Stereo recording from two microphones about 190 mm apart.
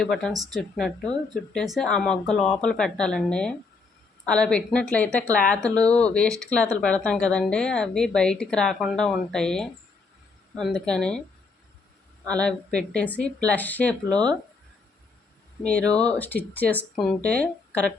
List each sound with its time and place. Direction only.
0.0 s speech: centre (ahead or behind)
12.2 s speech: 5° left (ahead or behind)
16.0 s speech: 10° left (ahead or behind)